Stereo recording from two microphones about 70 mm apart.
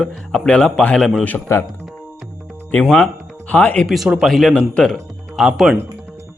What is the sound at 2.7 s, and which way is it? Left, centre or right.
Speech, left.